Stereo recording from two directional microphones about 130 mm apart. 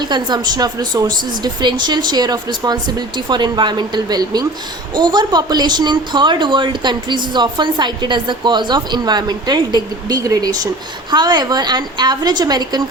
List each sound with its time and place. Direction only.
0.0 s speech: 35° right (ahead or behind)